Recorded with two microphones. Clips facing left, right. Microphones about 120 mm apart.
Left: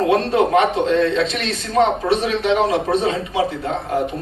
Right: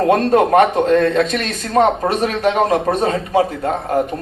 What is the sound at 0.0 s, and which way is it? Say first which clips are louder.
A man's voice: right 3 dB; 45° right (ahead or behind).